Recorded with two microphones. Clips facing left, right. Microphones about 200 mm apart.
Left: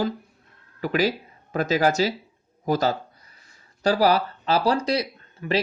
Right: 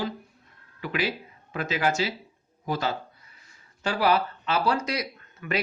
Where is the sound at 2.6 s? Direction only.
40° left (ahead or behind).